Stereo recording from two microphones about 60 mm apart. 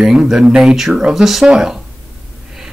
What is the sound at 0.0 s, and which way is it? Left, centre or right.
Speech, centre.